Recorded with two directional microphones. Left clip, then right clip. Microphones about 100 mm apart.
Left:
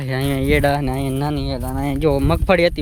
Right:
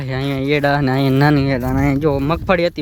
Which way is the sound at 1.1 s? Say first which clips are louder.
Right 8 dB; 80° right.